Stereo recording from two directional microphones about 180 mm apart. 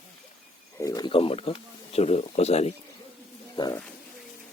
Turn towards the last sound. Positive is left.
turn(degrees=25)  # may be behind; listen again after turning